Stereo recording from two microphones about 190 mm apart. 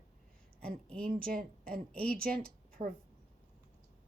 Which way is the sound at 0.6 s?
5° left (ahead or behind).